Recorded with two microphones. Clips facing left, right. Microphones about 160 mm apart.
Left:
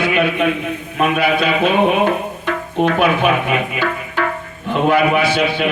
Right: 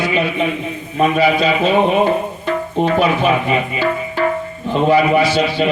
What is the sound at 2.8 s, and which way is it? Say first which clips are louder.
Speech: left 1 dB; 55° left (ahead or behind).